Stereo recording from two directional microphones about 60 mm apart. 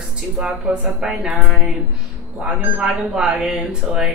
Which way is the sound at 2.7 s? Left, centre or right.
Centre.